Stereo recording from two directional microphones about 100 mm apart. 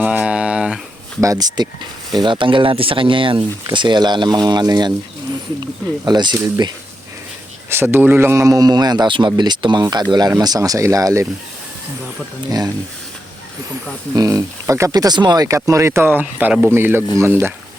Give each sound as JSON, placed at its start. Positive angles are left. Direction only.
{"t": 0.0, "sound": "a sound", "side_deg": -15}
{"t": 1.2, "sound": "a man's voice", "side_deg": -35}
{"t": 2.2, "sound": "speech", "side_deg": -55}
{"t": 6.1, "sound": "speech", "side_deg": -50}
{"t": 7.7, "sound": "a man's voice", "side_deg": -25}
{"t": 12.5, "sound": "a man's voice", "side_deg": -35}
{"t": 14.2, "sound": "a man's voice", "side_deg": -35}